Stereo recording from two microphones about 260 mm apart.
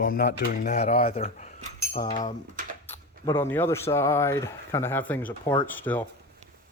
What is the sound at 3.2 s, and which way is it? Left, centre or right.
Speech, centre.